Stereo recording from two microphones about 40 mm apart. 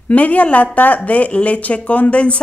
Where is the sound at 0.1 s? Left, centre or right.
Left.